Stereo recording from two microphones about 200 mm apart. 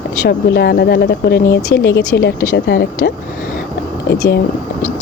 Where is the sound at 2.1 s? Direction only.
50° left (ahead or behind).